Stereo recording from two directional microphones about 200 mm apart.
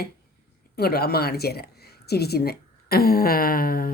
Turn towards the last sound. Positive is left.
turn(degrees=45)  # may be behind; listen again after turning